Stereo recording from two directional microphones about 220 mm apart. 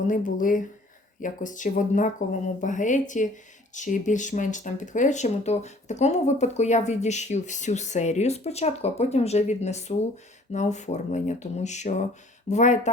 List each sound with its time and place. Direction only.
0.1 s speech: 35° left (ahead or behind)